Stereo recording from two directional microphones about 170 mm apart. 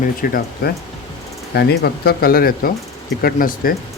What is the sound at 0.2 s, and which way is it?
Speech, 60° left (ahead or behind).